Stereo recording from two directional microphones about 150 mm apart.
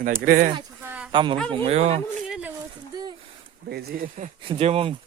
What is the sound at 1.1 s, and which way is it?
Speech, 30° right (ahead or behind).